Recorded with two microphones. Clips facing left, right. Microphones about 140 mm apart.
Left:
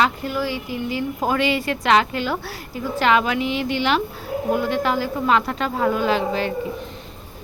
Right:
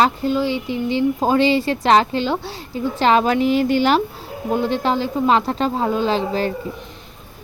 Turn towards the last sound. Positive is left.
turn(degrees=-35)  # may be behind; listen again after turning